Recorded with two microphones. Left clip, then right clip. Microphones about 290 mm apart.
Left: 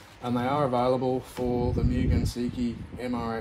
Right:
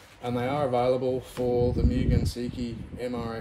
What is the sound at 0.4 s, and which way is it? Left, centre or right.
Speech, centre.